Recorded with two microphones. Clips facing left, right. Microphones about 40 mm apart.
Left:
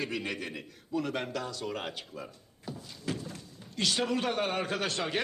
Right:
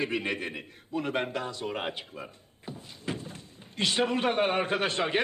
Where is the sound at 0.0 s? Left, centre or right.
Right.